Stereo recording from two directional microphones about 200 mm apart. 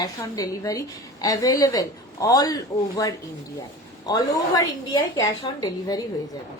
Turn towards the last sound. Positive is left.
turn(degrees=20)  # may be behind; listen again after turning